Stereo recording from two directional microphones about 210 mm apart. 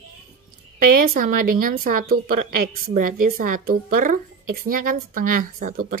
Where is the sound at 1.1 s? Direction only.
40° right (ahead or behind).